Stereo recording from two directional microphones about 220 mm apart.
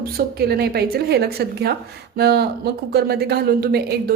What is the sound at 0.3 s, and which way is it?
A woman's voice, 45° right (ahead or behind).